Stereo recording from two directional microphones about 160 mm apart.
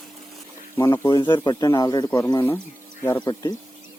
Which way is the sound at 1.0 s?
25° left (ahead or behind).